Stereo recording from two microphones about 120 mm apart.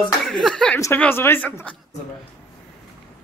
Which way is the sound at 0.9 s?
15° left (ahead or behind).